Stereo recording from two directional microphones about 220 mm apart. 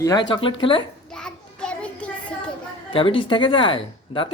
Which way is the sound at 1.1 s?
5° left (ahead or behind).